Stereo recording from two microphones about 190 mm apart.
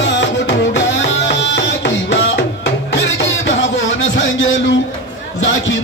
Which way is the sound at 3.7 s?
80° left.